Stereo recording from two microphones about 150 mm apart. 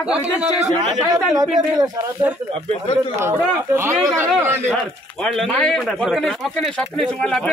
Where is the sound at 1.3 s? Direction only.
25° right (ahead or behind).